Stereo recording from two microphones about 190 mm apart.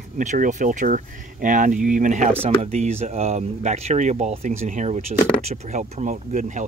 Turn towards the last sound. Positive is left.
turn(degrees=-40)  # may be behind; listen again after turning